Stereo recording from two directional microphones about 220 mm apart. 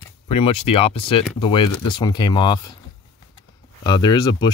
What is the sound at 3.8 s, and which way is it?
Speech, 20° left (ahead or behind).